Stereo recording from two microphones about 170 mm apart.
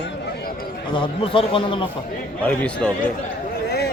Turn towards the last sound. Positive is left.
turn(degrees=70)  # may be behind; listen again after turning